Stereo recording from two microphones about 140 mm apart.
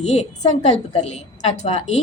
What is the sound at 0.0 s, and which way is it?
A woman's voice, 55° left (ahead or behind).